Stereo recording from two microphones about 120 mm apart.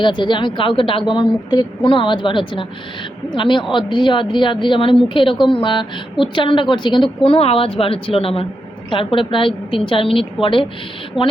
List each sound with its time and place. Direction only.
0.0 s speech: 40° left (ahead or behind)